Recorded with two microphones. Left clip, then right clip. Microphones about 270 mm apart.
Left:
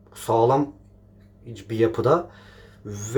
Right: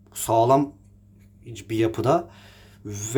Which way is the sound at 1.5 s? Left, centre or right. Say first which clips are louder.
Left 2 dB; right.